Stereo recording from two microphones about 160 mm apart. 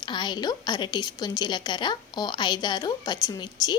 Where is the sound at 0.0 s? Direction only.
25° left (ahead or behind).